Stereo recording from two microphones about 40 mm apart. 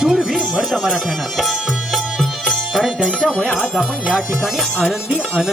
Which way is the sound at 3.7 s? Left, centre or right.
Centre.